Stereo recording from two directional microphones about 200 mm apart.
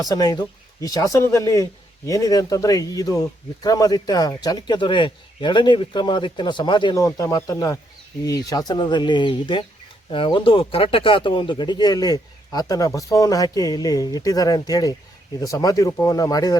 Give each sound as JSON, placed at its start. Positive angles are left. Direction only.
{"t": 0.0, "sound": "speech", "side_deg": 20}